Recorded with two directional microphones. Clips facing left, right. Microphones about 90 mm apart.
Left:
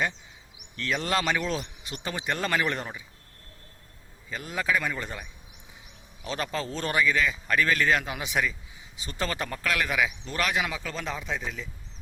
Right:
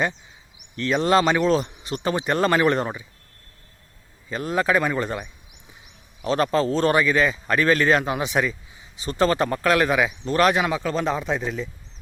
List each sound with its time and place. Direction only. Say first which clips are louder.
0.8 s speech: right 9 dB; 30° right (ahead or behind); by 3.0 s 45° right (ahead or behind)
4.3 s speech: right 7 dB; 45° right (ahead or behind)
6.2 s speech: right 11 dB; 45° right (ahead or behind)